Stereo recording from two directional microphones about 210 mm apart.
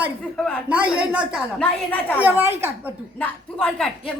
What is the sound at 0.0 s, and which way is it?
Speech, centre (ahead or behind).